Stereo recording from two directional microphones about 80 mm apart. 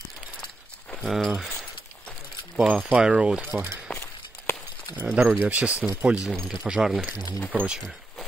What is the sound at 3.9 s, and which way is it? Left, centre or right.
Walk, centre.